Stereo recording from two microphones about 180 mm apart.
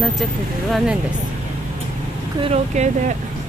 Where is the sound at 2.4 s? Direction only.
35° right (ahead or behind).